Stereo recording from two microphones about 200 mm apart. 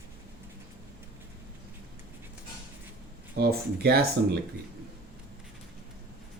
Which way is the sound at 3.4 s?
50° right (ahead or behind).